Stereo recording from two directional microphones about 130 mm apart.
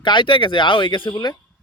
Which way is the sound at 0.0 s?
40° left (ahead or behind).